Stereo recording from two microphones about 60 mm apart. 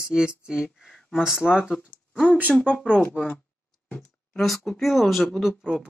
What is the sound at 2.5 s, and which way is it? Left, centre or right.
Speech, left.